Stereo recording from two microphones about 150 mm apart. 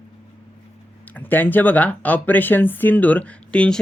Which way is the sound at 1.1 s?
10° left (ahead or behind).